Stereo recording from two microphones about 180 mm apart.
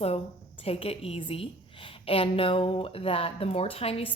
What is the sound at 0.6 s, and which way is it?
Speech, 35° left (ahead or behind).